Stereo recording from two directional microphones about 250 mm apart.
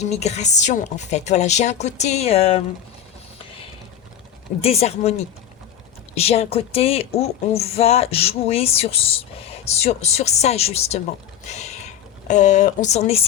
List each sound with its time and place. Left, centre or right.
0.0 s speech: left
4.6 s speech: left